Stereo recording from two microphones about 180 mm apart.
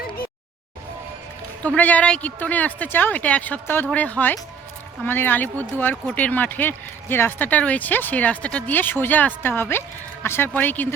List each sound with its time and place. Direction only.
1.6 s speech: 10° left (ahead or behind)